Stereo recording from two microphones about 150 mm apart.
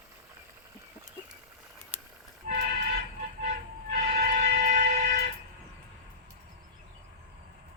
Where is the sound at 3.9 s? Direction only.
70° right (ahead or behind).